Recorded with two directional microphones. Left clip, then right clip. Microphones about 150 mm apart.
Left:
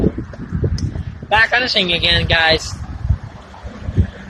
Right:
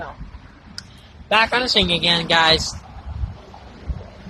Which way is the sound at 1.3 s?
40° right (ahead or behind).